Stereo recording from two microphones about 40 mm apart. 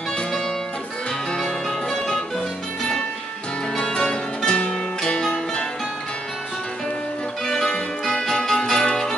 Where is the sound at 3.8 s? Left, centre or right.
Centre.